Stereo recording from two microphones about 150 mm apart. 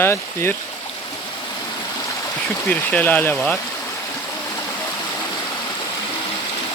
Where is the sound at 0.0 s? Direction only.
15° left (ahead or behind).